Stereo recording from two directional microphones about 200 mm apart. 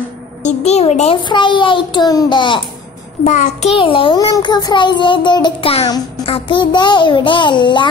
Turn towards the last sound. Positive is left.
turn(degrees=25)  # may be behind; listen again after turning